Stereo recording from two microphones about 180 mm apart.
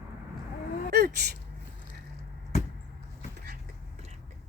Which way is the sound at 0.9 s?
65° right (ahead or behind).